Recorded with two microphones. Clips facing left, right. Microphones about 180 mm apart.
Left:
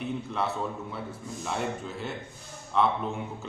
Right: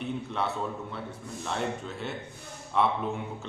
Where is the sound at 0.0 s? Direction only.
Centre (ahead or behind).